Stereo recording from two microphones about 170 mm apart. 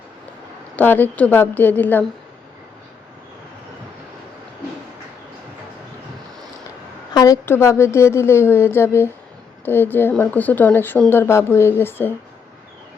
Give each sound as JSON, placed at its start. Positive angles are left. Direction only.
{"t": 0.8, "sound": "speech", "side_deg": 10}
{"t": 7.1, "sound": "a sound", "side_deg": 25}
{"t": 7.4, "sound": "speech", "side_deg": 15}